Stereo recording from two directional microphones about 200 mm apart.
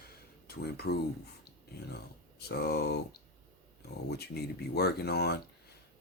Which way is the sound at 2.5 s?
55° left (ahead or behind).